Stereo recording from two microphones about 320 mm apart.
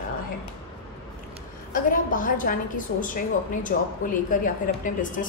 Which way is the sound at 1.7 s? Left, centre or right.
Left.